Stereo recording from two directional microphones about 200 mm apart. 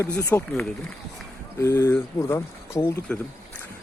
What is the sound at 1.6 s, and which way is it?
Speech, 15° left (ahead or behind).